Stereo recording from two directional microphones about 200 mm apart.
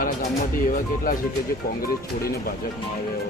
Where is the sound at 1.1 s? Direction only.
45° left (ahead or behind).